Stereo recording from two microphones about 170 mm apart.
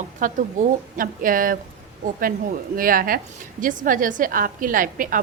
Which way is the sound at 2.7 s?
55° right (ahead or behind).